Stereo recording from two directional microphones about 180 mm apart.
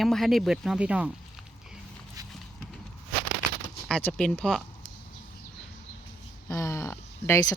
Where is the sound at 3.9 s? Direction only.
5° left (ahead or behind).